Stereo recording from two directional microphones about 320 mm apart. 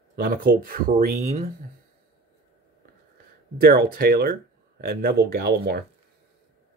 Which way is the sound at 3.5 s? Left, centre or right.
Right.